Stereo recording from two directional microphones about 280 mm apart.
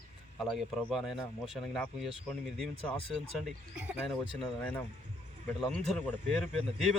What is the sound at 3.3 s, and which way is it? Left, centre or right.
Speech, centre.